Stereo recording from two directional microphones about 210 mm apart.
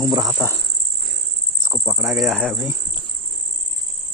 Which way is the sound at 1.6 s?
15° right (ahead or behind).